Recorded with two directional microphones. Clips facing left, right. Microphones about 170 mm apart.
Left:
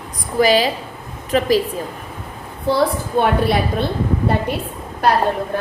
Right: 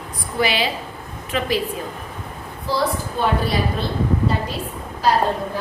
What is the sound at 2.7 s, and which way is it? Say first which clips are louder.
Speech: left 5 dB; 60° left (ahead or behind).